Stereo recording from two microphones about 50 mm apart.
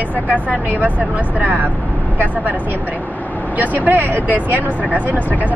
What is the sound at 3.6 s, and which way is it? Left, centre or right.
Speech, right.